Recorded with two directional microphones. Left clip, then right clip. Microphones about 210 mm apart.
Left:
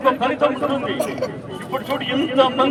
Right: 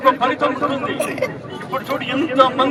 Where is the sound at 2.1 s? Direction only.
Centre (ahead or behind).